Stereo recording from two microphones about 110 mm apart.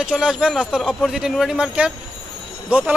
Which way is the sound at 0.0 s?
5° right (ahead or behind).